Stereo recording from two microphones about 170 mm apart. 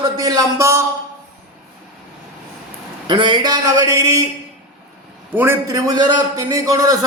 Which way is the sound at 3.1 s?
25° right (ahead or behind).